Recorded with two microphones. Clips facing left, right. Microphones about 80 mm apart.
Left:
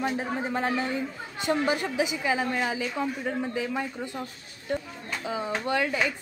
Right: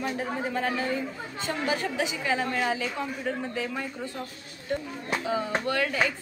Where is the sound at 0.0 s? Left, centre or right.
Left.